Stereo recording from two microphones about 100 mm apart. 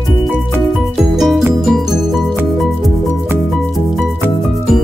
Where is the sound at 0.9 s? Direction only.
Centre (ahead or behind).